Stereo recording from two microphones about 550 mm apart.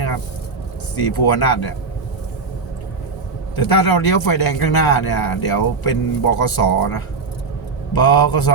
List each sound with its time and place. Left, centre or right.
0.9 s a man's voice: left
3.5 s a man's voice: left
7.9 s a man's voice: left